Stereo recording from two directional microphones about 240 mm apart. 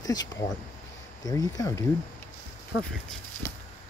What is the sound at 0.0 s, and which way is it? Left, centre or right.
Speech, centre.